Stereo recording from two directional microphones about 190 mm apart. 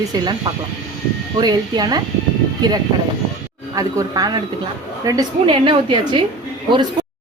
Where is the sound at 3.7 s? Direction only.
20° right (ahead or behind).